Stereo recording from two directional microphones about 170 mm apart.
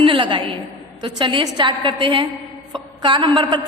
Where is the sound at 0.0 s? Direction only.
30° right (ahead or behind).